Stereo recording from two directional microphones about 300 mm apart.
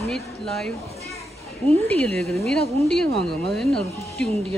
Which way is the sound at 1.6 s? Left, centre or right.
Centre.